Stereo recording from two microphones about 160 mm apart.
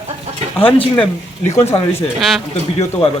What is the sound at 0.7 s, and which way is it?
Speech, 10° left (ahead or behind).